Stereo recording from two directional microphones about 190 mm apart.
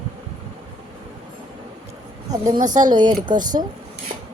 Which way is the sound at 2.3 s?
20° right (ahead or behind).